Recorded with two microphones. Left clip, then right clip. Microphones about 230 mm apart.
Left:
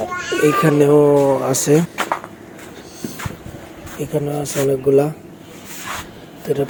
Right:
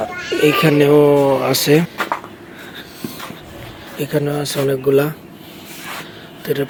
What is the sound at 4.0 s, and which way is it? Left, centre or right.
Speech, centre.